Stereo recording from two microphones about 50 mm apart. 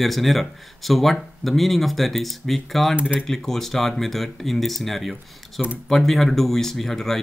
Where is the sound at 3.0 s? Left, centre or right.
Right.